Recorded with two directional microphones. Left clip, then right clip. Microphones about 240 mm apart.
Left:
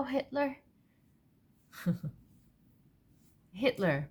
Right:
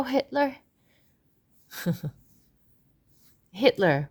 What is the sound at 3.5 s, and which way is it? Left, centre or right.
Speech, right.